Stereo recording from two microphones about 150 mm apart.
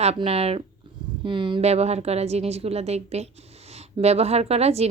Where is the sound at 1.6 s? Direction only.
45° right (ahead or behind).